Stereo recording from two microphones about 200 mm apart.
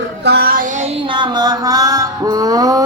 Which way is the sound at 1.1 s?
20° right (ahead or behind).